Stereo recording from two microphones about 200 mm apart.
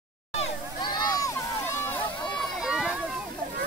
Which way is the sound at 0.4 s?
20° left (ahead or behind).